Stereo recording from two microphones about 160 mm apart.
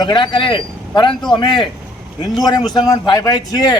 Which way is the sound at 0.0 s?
30° left (ahead or behind).